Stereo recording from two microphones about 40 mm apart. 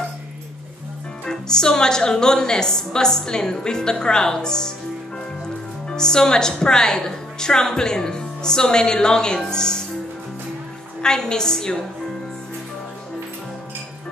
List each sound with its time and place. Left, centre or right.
1.2 s a woman's voice: centre
5.9 s a woman's voice: centre
11.0 s a woman's voice: centre